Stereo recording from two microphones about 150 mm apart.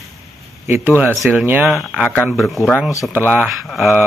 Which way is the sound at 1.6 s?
Centre (ahead or behind).